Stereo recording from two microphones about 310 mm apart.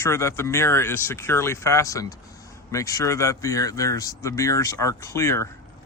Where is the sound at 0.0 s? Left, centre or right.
Centre.